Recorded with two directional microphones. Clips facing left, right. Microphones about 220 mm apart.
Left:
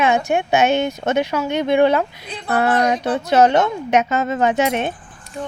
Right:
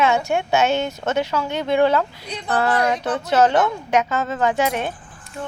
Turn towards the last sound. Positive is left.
turn(degrees=20)  # may be behind; listen again after turning